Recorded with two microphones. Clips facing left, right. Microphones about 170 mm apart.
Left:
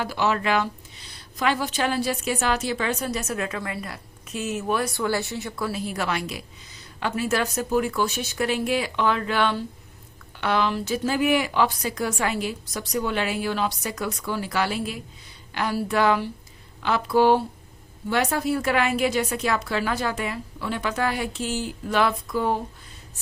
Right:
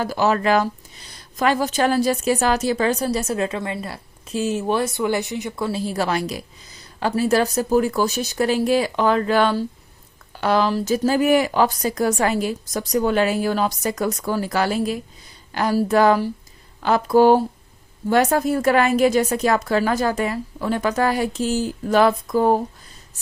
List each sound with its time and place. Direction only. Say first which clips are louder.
0.0 s a woman's voice: right 5 dB; 40° right (ahead or behind)